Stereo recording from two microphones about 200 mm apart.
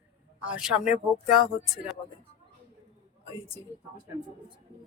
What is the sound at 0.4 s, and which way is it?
Speech, 5° right (ahead or behind).